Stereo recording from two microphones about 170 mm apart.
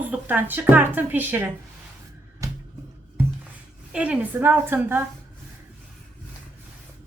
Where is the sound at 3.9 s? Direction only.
5° right (ahead or behind).